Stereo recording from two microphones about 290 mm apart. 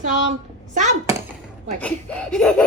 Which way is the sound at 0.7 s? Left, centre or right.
Right.